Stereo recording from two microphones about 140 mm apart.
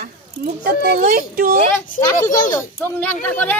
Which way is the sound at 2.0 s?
65° left (ahead or behind).